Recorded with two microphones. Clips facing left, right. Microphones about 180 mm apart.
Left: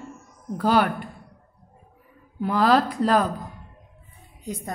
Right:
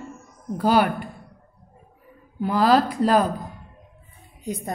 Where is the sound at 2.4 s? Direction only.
5° right (ahead or behind).